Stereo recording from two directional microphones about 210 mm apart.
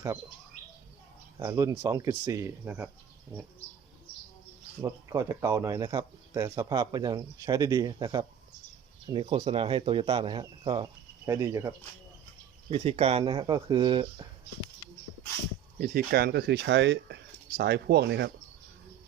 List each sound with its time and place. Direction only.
1.4 s speech: 15° right (ahead or behind)
4.8 s speech: 15° right (ahead or behind)
12.7 s speech: 30° right (ahead or behind)
15.8 s speech: 45° right (ahead or behind)